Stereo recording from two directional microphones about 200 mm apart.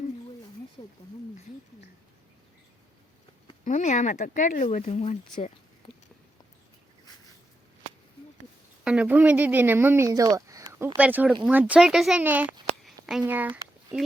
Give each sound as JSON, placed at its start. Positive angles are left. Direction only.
{"t": 0.8, "sound": "a sound", "side_deg": 25}
{"t": 3.6, "sound": "speech", "side_deg": 40}
{"t": 8.8, "sound": "speech", "side_deg": -5}